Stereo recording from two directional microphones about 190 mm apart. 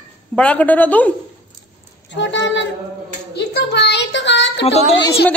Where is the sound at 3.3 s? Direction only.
60° left (ahead or behind).